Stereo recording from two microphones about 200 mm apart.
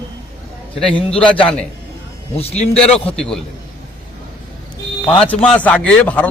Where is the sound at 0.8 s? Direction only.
5° left (ahead or behind).